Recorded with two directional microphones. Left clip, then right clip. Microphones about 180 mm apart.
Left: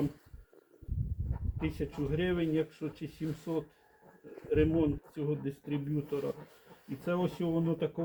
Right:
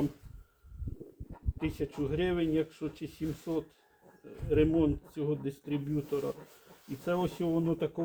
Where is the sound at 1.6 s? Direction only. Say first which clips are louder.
Right 2 dB; 30° right (ahead or behind).